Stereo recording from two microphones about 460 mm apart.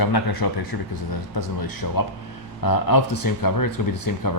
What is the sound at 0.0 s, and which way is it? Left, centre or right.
Speech, left.